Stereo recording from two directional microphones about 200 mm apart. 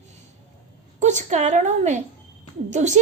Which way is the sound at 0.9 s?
35° right (ahead or behind).